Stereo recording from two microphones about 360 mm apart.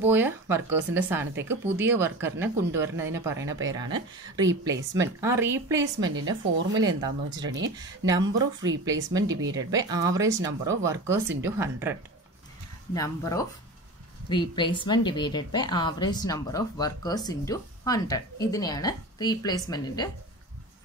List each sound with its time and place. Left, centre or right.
0.0 s speech: centre
6.1 s speech: right
6.7 s speech: centre
7.4 s speech: right
7.7 s speech: centre
8.5 s speech: right
8.8 s speech: centre
12.9 s a woman's voice: centre